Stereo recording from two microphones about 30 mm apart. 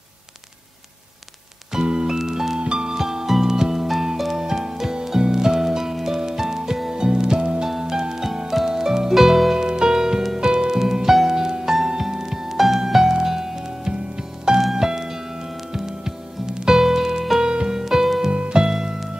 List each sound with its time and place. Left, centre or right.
1.7 s music: right
2.1 s music: centre
2.6 s music: right
2.9 s music: centre
9.6 s music: right
9.8 s music: centre
13.0 s music: right
17.7 s music: centre
18.3 s music: right
18.7 s music: centre